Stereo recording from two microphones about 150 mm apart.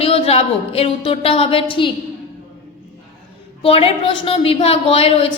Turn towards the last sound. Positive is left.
turn(degrees=40)  # may be behind; listen again after turning